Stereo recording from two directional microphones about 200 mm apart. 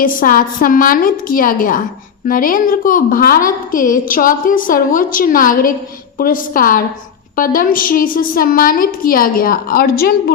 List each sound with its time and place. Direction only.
0.0 s a woman's voice: 45° left (ahead or behind)